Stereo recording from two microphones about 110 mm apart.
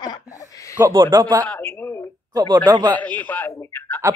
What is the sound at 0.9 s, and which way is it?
Speech, 45° right (ahead or behind).